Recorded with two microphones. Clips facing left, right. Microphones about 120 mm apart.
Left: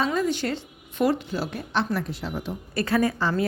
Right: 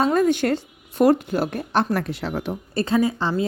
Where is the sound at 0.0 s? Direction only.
55° right (ahead or behind); by 2.6 s 70° right (ahead or behind).